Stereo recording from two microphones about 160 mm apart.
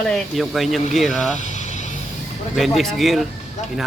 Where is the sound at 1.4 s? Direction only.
50° left (ahead or behind).